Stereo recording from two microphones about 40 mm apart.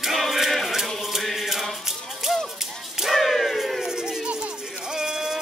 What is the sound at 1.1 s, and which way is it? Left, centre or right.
Chant, centre.